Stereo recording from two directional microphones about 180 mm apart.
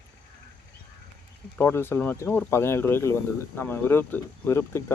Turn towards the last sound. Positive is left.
turn(degrees=15)  # may be behind; listen again after turning